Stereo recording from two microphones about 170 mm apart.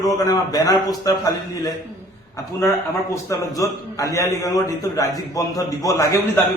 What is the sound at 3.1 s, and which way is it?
A man's voice, 20° left (ahead or behind).